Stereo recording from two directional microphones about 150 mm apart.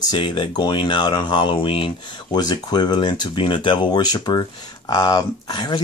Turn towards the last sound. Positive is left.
turn(degrees=30)  # may be behind; listen again after turning